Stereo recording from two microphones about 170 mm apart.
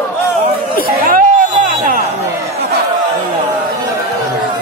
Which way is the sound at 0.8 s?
55° right (ahead or behind).